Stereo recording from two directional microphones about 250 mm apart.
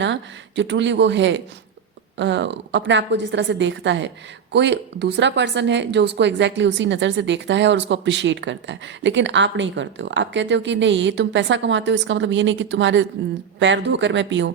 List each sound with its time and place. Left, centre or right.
0.0 s a woman's voice: right